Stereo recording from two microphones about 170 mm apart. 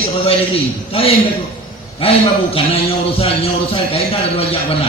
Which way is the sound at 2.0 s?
35° left (ahead or behind).